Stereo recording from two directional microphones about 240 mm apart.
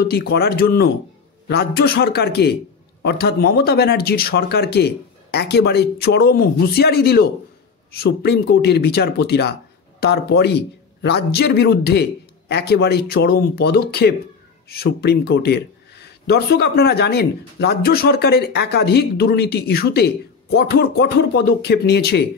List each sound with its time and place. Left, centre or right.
0.1 s speech: left